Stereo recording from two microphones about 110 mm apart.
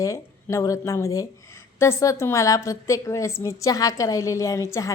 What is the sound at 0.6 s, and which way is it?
A woman's voice, 30° left (ahead or behind).